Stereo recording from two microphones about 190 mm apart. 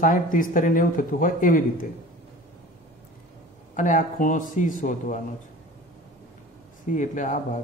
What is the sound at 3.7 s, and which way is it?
Speech, 45° left (ahead or behind).